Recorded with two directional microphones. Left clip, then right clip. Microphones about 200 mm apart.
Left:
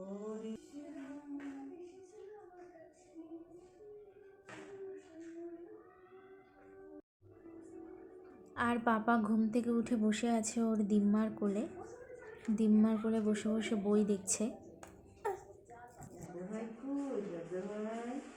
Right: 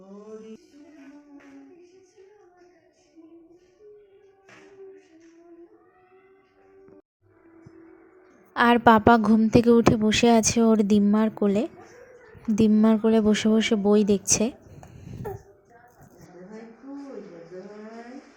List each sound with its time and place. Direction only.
8.5 s a woman's voice: 45° right (ahead or behind)